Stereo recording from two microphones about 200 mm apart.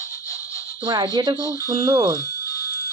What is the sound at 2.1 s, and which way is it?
Music, 15° left (ahead or behind).